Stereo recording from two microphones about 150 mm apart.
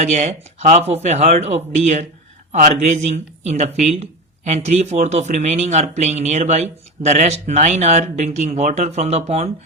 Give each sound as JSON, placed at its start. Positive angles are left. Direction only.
{"t": 0.0, "sound": "speech", "side_deg": -50}